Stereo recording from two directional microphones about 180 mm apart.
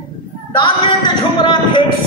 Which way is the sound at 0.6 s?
25° left (ahead or behind).